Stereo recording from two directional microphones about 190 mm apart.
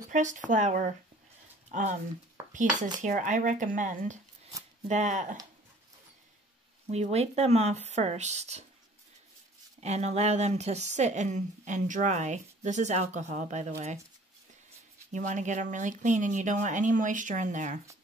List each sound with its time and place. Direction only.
0.1 s a woman's voice: 40° right (ahead or behind)
6.9 s a woman's voice: 35° right (ahead or behind)
9.8 s a woman's voice: 35° right (ahead or behind)
15.1 s a woman's voice: 40° right (ahead or behind)